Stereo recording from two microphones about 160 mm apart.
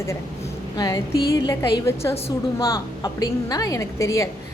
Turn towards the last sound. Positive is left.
turn(degrees=20)  # may be behind; listen again after turning